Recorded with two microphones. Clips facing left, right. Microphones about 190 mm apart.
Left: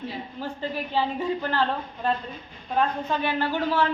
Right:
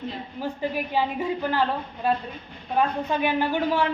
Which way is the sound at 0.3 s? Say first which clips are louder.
Right 4 dB; 10° right (ahead or behind).